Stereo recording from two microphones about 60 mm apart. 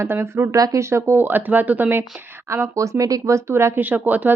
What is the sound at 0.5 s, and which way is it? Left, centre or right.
Speech, right.